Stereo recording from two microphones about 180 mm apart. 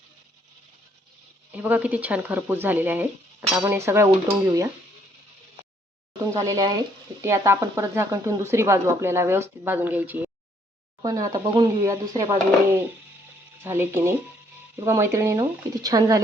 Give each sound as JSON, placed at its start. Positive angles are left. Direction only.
{"t": 1.5, "sound": "speech", "side_deg": -10}
{"t": 6.3, "sound": "speech", "side_deg": -20}
{"t": 11.0, "sound": "speech", "side_deg": -20}
{"t": 13.6, "sound": "speech", "side_deg": -10}